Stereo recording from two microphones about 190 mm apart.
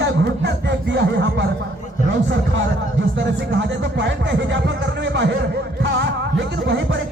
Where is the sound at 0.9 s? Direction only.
65° right (ahead or behind).